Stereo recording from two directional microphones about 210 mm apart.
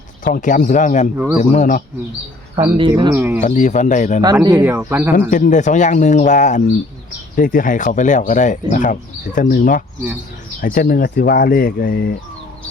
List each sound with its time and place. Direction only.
0.3 s speech: 40° left (ahead or behind)
1.1 s speech: 10° right (ahead or behind)
1.4 s speech: 35° left (ahead or behind)
2.9 s speech: 15° right (ahead or behind)
3.4 s speech: 35° left (ahead or behind)
4.2 s speech: 20° right (ahead or behind)
5.3 s speech: 35° left (ahead or behind)